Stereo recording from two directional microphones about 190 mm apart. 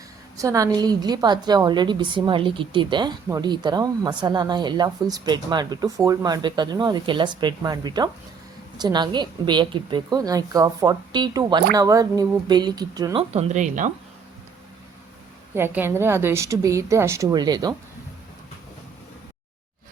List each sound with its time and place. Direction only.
0.3 s a woman's voice: 15° right (ahead or behind)
13.3 s speech: 40° right (ahead or behind)
15.5 s a woman's voice: 10° right (ahead or behind)